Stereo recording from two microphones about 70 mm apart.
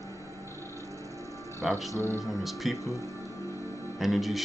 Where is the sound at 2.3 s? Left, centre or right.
Centre.